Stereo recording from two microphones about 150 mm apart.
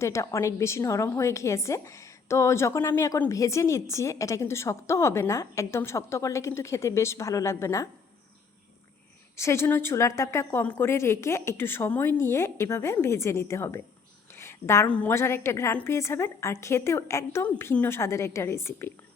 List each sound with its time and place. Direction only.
0.0 s a woman's voice: 20° left (ahead or behind)
9.3 s a woman's voice: 15° left (ahead or behind)